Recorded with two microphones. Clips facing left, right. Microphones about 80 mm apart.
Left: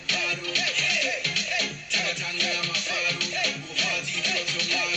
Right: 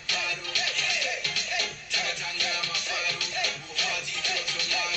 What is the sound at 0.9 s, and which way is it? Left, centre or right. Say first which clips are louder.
Music: left 3 dB; left.